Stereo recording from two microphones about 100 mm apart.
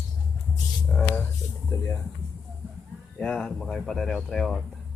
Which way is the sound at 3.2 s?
10° left (ahead or behind).